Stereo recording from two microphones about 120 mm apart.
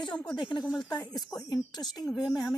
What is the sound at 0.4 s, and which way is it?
Speech, 40° left (ahead or behind).